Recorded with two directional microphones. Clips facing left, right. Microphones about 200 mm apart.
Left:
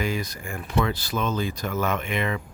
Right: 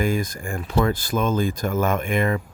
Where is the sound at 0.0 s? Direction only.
50° right (ahead or behind).